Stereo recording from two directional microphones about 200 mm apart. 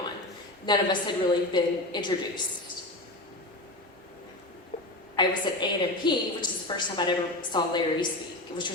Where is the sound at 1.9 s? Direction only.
20° left (ahead or behind).